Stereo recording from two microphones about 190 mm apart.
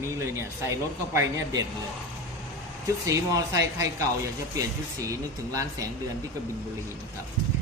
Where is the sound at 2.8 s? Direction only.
15° right (ahead or behind).